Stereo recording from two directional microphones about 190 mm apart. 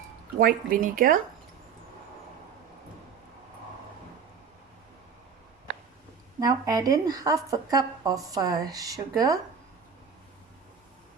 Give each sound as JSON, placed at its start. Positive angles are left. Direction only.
{"t": 0.3, "sound": "speech", "side_deg": -50}
{"t": 6.4, "sound": "a woman's voice", "side_deg": -20}